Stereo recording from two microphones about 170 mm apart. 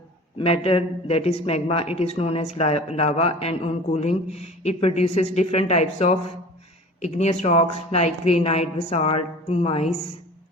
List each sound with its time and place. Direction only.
0.3 s speech: 35° left (ahead or behind)